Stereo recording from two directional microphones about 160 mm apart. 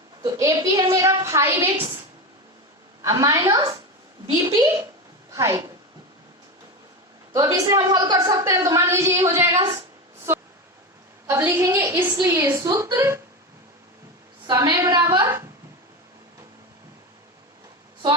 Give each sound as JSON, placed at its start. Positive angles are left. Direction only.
{"t": 0.2, "sound": "a woman's voice", "side_deg": -25}
{"t": 3.0, "sound": "a woman's voice", "side_deg": -20}
{"t": 7.5, "sound": "a woman's voice", "side_deg": -20}
{"t": 11.3, "sound": "a woman's voice", "side_deg": -15}
{"t": 14.4, "sound": "a woman's voice", "side_deg": -30}
{"t": 14.8, "sound": "a woman's voice", "side_deg": -15}